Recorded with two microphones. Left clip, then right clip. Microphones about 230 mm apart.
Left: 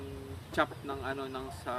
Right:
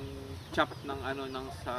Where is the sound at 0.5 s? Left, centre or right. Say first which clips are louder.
Right 1 dB; centre.